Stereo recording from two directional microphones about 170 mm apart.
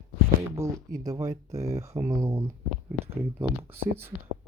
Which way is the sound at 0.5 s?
15° right (ahead or behind).